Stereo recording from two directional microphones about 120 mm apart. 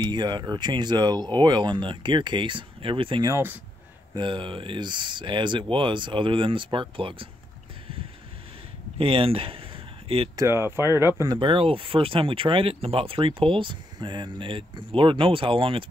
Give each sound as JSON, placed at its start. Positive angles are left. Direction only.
{"t": 0.0, "sound": "speech", "side_deg": -40}
{"t": 3.3, "sound": "speech", "side_deg": -20}
{"t": 4.1, "sound": "speech", "side_deg": -45}
{"t": 8.9, "sound": "speech", "side_deg": -50}
{"t": 10.3, "sound": "speech", "side_deg": -25}
{"t": 11.2, "sound": "speech", "side_deg": -45}